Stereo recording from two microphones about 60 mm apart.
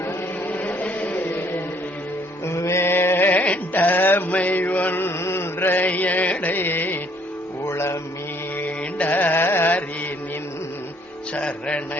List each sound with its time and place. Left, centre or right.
0.4 s a sound: left
2.5 s music: left
4.4 s mantra: left
5.2 s music: left
7.7 s mantra: left
8.5 s carnatic music: left
11.3 s music: centre